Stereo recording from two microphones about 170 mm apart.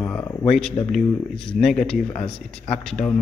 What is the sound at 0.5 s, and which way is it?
Speech, 5° left (ahead or behind).